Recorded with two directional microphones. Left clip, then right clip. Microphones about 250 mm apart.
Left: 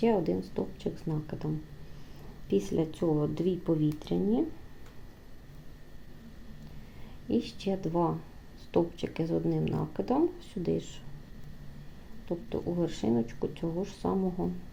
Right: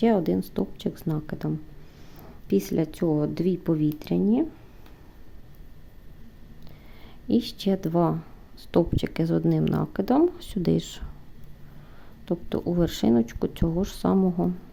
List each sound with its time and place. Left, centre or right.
0.0 s speech: right
2.5 s speech: right
7.3 s speech: right
12.3 s speech: right